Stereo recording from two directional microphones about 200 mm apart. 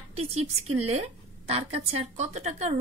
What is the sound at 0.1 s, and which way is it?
A woman's voice, 30° right (ahead or behind).